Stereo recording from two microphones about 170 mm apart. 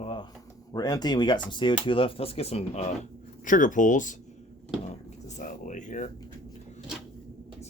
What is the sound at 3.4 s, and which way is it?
Speech, 50° left (ahead or behind).